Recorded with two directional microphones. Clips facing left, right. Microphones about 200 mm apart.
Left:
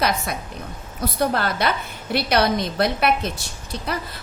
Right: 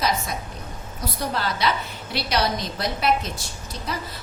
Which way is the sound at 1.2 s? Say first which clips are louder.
Left 4 dB; 55° left (ahead or behind).